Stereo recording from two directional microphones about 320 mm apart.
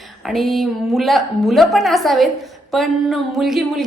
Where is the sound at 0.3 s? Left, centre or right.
Centre.